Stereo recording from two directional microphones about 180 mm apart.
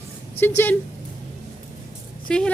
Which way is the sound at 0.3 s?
10° left (ahead or behind).